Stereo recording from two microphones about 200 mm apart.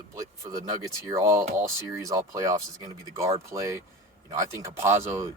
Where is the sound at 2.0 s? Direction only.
15° right (ahead or behind).